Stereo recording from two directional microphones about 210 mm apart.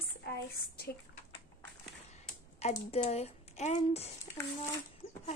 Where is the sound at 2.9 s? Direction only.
30° left (ahead or behind).